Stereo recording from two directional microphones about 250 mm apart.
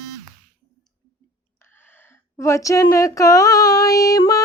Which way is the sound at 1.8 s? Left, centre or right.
Centre.